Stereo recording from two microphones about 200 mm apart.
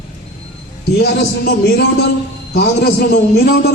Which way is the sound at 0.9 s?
50° left (ahead or behind).